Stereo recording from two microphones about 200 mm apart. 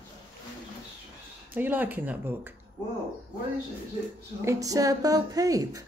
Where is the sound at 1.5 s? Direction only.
10° right (ahead or behind).